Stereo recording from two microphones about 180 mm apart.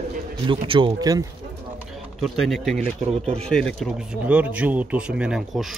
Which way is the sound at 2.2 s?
Centre (ahead or behind).